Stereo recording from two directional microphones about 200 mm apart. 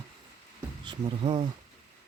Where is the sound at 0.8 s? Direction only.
25° right (ahead or behind).